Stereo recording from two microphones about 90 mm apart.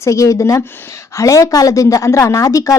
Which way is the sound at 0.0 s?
35° left (ahead or behind).